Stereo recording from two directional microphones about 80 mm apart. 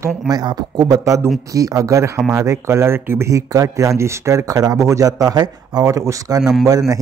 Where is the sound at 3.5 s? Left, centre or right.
Right.